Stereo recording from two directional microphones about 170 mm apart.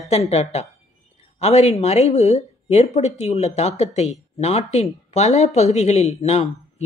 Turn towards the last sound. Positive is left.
turn(degrees=40)  # may be behind; listen again after turning